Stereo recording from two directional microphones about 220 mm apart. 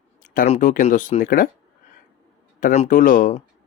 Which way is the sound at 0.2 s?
35° left (ahead or behind).